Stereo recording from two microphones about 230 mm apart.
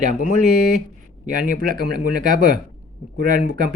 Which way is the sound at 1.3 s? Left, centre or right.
Right.